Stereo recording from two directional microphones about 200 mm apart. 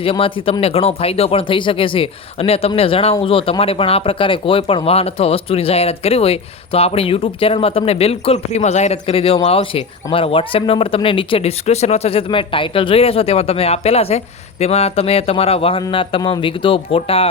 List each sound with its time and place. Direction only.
0.0 s speech: 25° left (ahead or behind)